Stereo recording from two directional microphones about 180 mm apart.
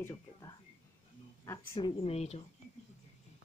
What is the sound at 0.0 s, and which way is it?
Whispering, 20° left (ahead or behind).